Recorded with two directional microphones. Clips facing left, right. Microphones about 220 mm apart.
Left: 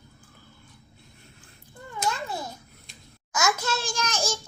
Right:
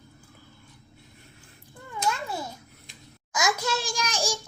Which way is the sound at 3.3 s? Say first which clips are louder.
Even; 15° right (ahead or behind).